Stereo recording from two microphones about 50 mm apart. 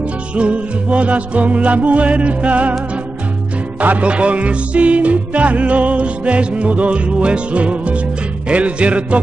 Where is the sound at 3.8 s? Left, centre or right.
Right.